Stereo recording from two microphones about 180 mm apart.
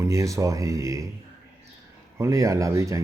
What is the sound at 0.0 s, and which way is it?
Speech, 15° right (ahead or behind).